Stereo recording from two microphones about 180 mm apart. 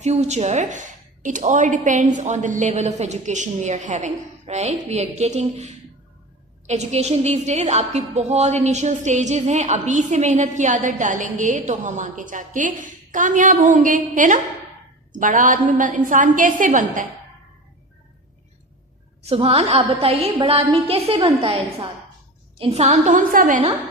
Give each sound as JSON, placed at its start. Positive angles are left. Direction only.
{"t": 0.0, "sound": "a woman's voice", "side_deg": -40}
{"t": 19.2, "sound": "a woman's voice", "side_deg": -30}